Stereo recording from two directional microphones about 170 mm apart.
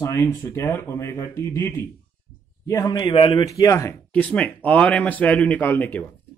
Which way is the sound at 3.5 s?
20° left (ahead or behind).